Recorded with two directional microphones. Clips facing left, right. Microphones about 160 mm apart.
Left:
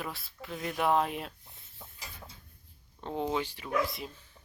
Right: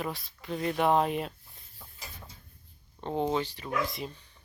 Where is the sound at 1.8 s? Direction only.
25° left (ahead or behind).